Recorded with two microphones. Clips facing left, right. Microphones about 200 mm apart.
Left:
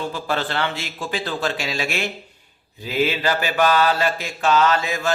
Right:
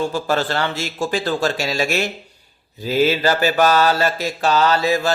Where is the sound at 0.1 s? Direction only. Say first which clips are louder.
Right 4 dB; 40° right (ahead or behind).